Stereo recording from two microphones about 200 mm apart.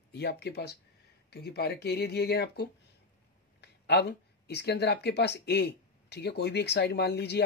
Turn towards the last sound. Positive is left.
turn(degrees=55)  # may be behind; listen again after turning